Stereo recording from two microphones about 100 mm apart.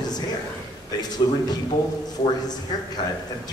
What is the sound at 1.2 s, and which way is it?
Speech, 55° left (ahead or behind).